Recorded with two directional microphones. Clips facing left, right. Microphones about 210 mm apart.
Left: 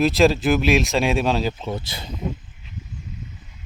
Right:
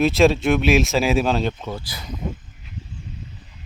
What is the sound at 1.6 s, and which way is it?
Speech, 25° left (ahead or behind).